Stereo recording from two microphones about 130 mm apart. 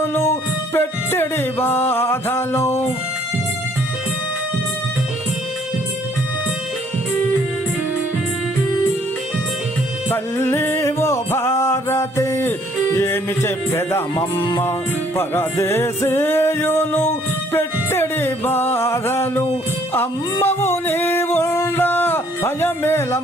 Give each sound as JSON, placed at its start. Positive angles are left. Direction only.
{"t": 0.0, "sound": "music", "side_deg": 20}
{"t": 10.1, "sound": "music", "side_deg": 20}